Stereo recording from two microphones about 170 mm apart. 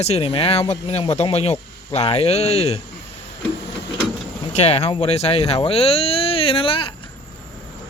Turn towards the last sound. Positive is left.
turn(degrees=30)  # may be behind; listen again after turning